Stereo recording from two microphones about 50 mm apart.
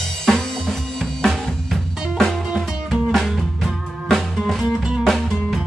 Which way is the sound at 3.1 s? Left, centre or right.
Centre.